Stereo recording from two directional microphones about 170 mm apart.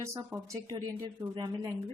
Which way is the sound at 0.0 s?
20° right (ahead or behind).